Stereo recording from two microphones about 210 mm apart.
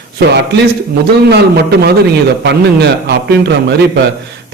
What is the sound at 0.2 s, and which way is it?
Speech, 55° right (ahead or behind).